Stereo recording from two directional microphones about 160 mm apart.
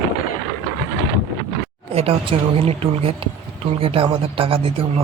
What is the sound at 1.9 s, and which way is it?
Speech, 40° right (ahead or behind).